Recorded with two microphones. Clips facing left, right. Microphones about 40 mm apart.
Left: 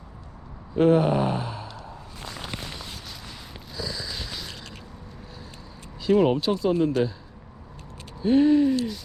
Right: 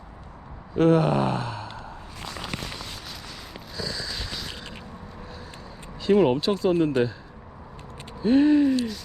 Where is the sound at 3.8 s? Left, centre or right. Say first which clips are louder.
Right 1 dB; centre.